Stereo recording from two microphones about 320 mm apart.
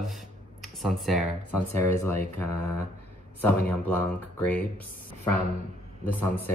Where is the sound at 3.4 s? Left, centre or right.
Centre.